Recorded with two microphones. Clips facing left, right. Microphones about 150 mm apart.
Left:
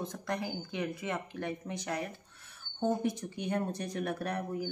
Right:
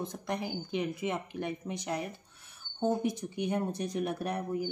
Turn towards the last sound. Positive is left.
turn(degrees=-15)  # may be behind; listen again after turning